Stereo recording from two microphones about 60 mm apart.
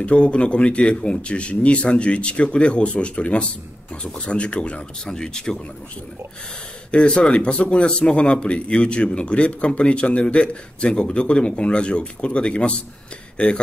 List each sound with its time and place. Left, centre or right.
0.0 s speech: centre
6.9 s speech: centre